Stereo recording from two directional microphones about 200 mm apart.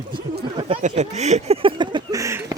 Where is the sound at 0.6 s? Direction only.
30° right (ahead or behind).